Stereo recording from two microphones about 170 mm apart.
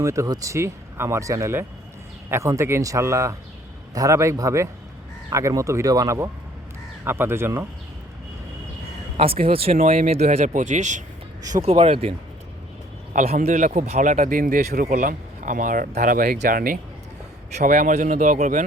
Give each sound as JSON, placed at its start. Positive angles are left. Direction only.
{"t": 0.0, "sound": "speech", "side_deg": -20}
{"t": 9.5, "sound": "speech", "side_deg": -35}
{"t": 13.4, "sound": "speech", "side_deg": -45}